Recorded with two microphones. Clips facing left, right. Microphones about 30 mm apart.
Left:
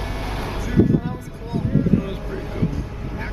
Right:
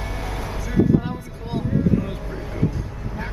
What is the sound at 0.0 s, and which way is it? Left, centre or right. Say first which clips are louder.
Vehicle: left 2 dB; left.